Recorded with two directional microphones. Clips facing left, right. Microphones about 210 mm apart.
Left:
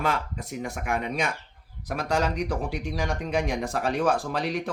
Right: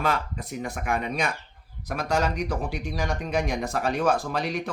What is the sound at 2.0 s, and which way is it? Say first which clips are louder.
Speech: even; 30° left (ahead or behind).